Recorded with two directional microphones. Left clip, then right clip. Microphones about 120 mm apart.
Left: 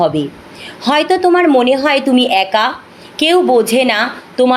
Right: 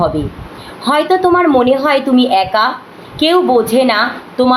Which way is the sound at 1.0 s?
40° left (ahead or behind).